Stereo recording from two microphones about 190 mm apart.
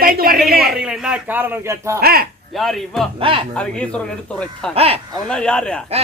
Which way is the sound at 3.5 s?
5° left (ahead or behind).